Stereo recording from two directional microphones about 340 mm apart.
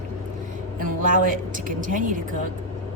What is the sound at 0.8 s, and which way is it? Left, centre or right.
A woman's voice, right.